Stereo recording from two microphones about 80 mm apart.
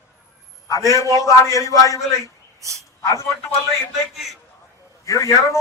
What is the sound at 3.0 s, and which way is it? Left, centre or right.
Speech, left.